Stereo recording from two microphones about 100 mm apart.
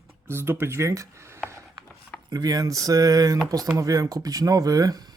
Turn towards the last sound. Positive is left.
turn(degrees=-40)  # may be behind; listen again after turning